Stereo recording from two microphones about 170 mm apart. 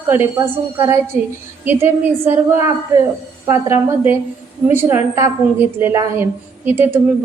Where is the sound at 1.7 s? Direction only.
15° right (ahead or behind).